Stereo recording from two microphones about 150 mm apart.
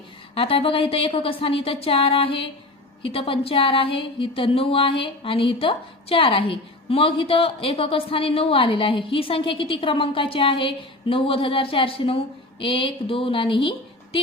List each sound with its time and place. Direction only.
0.3 s speech: 40° left (ahead or behind)